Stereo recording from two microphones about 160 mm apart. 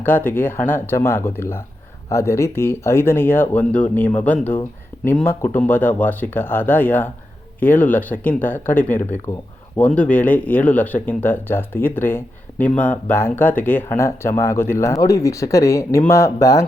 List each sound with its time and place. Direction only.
0.0 s speech: 10° left (ahead or behind)